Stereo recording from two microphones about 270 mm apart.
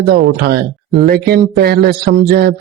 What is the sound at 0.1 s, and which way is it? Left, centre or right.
Speech, right.